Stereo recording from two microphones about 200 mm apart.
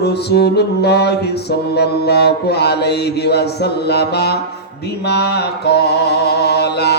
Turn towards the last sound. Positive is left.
turn(degrees=55)  # may be behind; listen again after turning